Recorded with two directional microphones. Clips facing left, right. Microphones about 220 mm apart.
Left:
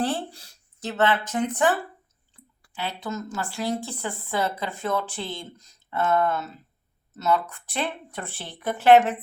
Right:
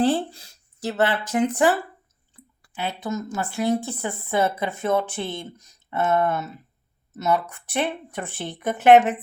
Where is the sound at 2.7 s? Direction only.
20° right (ahead or behind).